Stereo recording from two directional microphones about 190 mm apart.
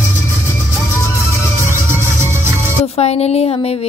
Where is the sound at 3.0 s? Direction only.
35° left (ahead or behind).